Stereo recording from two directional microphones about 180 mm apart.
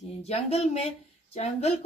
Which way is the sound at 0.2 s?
35° left (ahead or behind).